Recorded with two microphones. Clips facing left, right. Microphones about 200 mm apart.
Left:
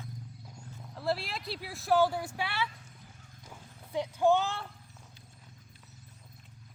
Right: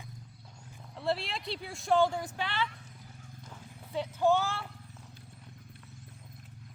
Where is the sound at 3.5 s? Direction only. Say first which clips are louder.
Left 1 dB; 15° left (ahead or behind).